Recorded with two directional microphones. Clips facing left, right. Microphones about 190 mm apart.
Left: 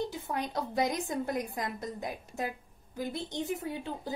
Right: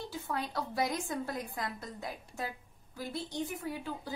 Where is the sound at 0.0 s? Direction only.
20° left (ahead or behind).